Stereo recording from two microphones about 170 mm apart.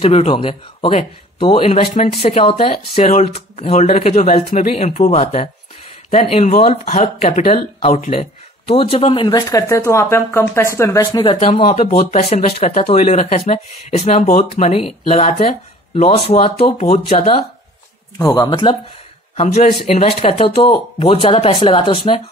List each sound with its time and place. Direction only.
0.0 s speech: 35° left (ahead or behind)
9.5 s speech: 15° left (ahead or behind)
11.5 s speech: 40° left (ahead or behind)
14.2 s speech: 55° left (ahead or behind)
14.7 s speech: 35° left (ahead or behind)
18.2 s speech: 15° left (ahead or behind)
18.5 s speech: 30° left (ahead or behind)